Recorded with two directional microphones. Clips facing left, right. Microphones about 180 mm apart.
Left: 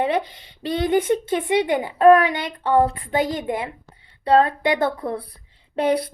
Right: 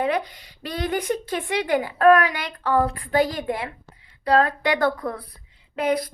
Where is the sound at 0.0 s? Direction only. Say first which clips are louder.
Left 2 dB; 25° left (ahead or behind).